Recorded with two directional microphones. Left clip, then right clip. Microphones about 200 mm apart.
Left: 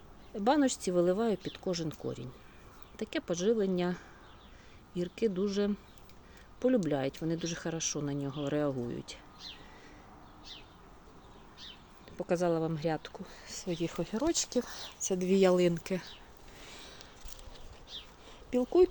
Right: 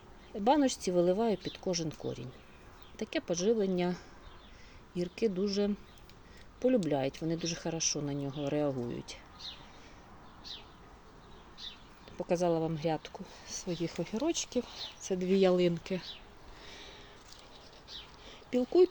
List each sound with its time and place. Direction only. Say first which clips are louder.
0.3 s speech: right 1 dB; centre (ahead or behind)
6.8 s speech: even; centre (ahead or behind)
12.1 s speech: even; centre (ahead or behind)
16.6 s a sound: right 1 dB; centre (ahead or behind)